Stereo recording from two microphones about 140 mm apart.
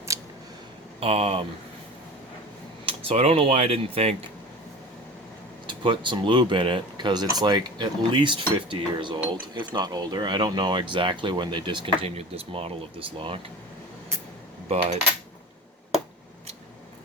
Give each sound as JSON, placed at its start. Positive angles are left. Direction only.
{"t": 0.1, "sound": "a sound", "side_deg": -20}
{"t": 0.9, "sound": "speech", "side_deg": -45}
{"t": 2.8, "sound": "speech", "side_deg": -45}
{"t": 5.6, "sound": "speech", "side_deg": -35}